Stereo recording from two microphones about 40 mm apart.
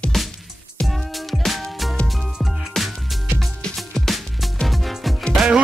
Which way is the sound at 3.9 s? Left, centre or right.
Centre.